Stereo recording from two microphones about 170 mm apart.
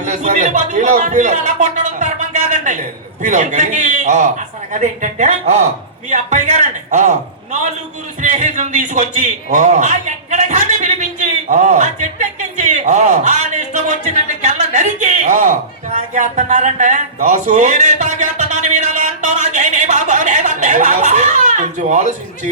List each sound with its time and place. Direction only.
0.0 s a man's voice: 45° right (ahead or behind)
8.2 s a man's voice: 45° right (ahead or behind)